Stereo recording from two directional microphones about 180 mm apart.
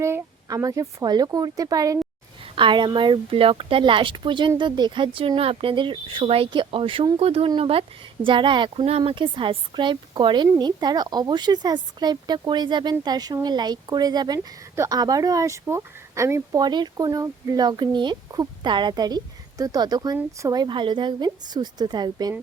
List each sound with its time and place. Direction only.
0.0 s speech: 15° right (ahead or behind)